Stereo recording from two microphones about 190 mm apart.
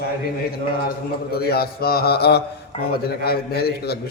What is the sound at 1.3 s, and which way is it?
A man's voice, 55° left (ahead or behind).